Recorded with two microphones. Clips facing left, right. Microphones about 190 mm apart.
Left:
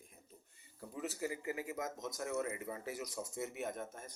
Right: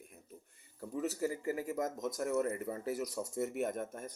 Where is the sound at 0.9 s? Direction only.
40° right (ahead or behind).